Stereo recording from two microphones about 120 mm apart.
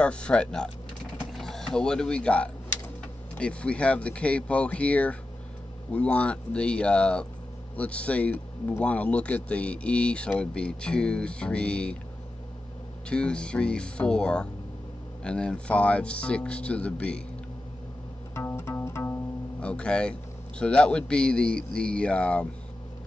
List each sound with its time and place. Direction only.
0.0 s a man's voice: 10° left (ahead or behind)
13.1 s a man's voice: 10° left (ahead or behind)
18.3 s music: 20° left (ahead or behind)
19.6 s a man's voice: 10° left (ahead or behind)